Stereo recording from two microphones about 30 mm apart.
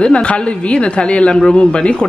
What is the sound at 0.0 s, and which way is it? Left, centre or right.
Speech, left.